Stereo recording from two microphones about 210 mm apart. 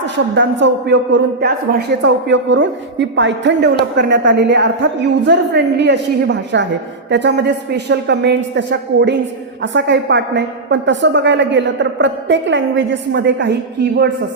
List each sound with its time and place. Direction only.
0.0 s a woman's voice: 60° right (ahead or behind)